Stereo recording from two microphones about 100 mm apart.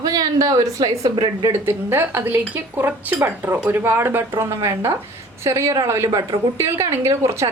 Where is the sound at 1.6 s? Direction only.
25° right (ahead or behind).